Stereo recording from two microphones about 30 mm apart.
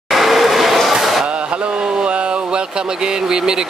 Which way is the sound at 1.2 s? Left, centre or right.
Right.